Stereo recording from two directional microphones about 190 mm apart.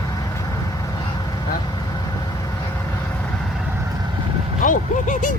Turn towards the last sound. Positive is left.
turn(degrees=45)  # may be behind; listen again after turning